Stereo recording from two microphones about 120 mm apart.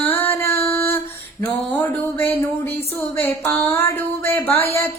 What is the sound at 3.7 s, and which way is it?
Music, 20° left (ahead or behind).